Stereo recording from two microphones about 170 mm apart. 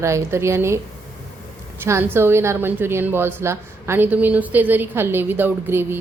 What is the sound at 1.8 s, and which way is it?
Speech, 15° right (ahead or behind).